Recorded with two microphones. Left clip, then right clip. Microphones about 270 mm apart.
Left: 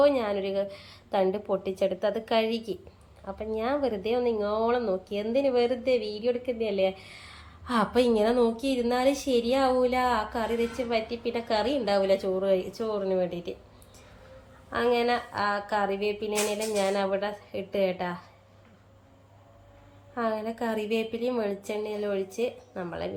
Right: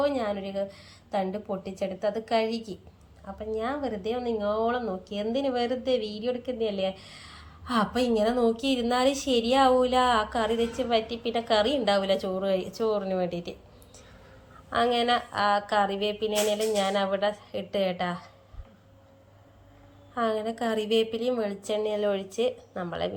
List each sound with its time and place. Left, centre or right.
0.0 s a woman's voice: centre
14.7 s a woman's voice: centre
20.1 s a woman's voice: centre